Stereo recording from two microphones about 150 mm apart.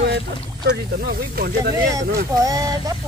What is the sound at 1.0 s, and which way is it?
Speech, 90° right.